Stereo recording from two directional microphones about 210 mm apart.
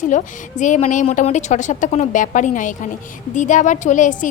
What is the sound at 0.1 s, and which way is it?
A woman's voice, 35° left (ahead or behind).